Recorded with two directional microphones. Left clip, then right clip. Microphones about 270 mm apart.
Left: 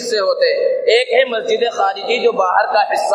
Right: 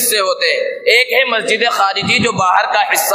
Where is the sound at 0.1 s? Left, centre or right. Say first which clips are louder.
Even; right.